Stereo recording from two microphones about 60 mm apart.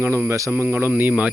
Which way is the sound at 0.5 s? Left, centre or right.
Right.